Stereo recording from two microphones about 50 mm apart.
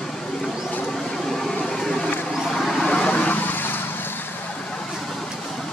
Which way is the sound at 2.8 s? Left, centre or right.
Left.